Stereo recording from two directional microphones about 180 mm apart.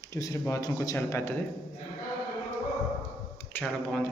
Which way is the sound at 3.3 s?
10° left (ahead or behind).